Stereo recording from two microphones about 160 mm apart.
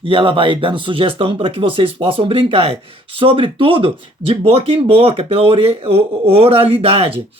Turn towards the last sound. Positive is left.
turn(degrees=-35)  # may be behind; listen again after turning